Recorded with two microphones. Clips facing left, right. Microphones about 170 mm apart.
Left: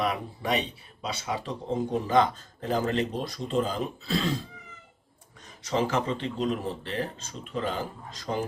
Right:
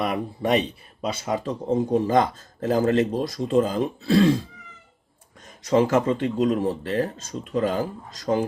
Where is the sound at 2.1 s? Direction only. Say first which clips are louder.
Right 2 dB; 45° right (ahead or behind).